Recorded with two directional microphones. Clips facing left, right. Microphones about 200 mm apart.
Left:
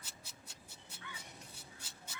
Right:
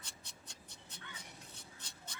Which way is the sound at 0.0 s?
5° left (ahead or behind).